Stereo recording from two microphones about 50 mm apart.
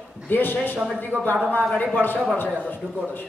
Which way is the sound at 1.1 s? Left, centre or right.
Right.